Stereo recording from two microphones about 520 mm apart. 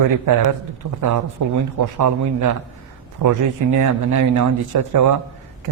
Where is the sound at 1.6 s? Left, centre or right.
Right.